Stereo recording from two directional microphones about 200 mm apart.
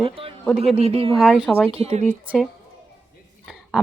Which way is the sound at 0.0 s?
25° right (ahead or behind).